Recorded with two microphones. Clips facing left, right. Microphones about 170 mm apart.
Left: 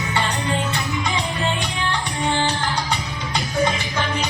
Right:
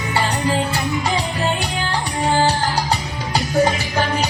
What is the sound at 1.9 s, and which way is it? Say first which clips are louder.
Music: right 3 dB; 35° right (ahead or behind).